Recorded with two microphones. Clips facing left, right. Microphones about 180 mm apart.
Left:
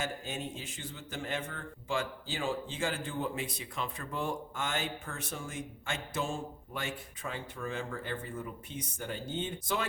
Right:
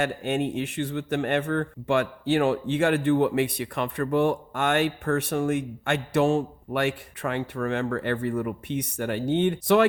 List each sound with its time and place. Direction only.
0.0 s speech: 65° right (ahead or behind)